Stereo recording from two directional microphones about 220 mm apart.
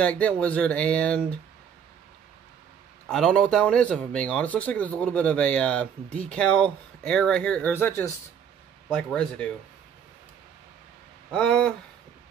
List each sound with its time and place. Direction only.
0.0 s speech: 5° left (ahead or behind)
3.1 s speech: centre (ahead or behind)
11.3 s speech: 5° left (ahead or behind)